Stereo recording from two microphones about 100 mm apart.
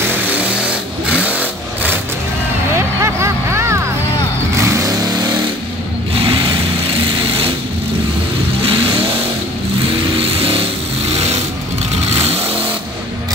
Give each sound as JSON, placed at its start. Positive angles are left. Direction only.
{"t": 0.0, "sound": "vehicle", "side_deg": -20}
{"t": 3.0, "sound": "a sound", "side_deg": -30}
{"t": 4.6, "sound": "vehicle", "side_deg": -30}
{"t": 6.1, "sound": "a sound", "side_deg": -60}
{"t": 7.1, "sound": "sewing machine", "side_deg": -65}
{"t": 8.6, "sound": "vehicle", "side_deg": -65}
{"t": 10.4, "sound": "vehicle", "side_deg": -70}
{"t": 12.2, "sound": "vehicle", "side_deg": -90}